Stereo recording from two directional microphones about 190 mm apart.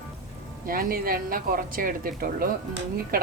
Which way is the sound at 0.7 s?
50° right (ahead or behind).